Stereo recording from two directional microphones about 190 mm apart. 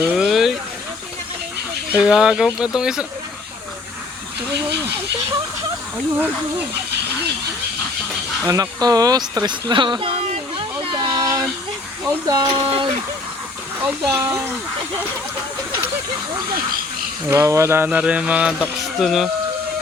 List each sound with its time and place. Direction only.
0.0 s a sound: 5° right (ahead or behind)
1.9 s speech: 5° right (ahead or behind)
6.1 s mantra: 10° right (ahead or behind)
8.4 s speech: 20° right (ahead or behind)
10.8 s a sound: 25° right (ahead or behind)
12.2 s speech: 20° right (ahead or behind)
14.1 s mantra: 15° right (ahead or behind)
17.2 s mantra: 15° right (ahead or behind)
18.6 s speech: centre (ahead or behind)